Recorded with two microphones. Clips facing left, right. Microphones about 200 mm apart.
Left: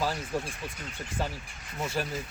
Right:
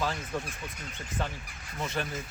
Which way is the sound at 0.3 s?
10° left (ahead or behind).